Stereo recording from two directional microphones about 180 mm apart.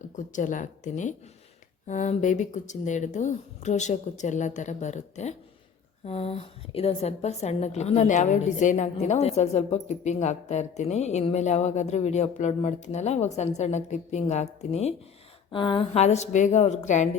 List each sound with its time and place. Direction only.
0.2 s a woman's voice: 45° left (ahead or behind)